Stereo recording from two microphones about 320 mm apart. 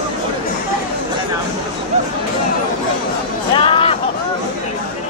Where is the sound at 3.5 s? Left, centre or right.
Centre.